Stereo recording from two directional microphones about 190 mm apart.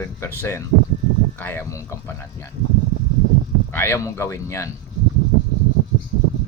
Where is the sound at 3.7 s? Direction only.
10° left (ahead or behind).